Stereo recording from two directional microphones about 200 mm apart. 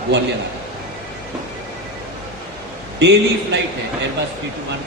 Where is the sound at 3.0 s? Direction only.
60° right (ahead or behind).